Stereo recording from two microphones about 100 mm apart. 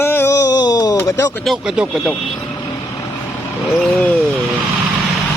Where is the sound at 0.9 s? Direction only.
30° left (ahead or behind).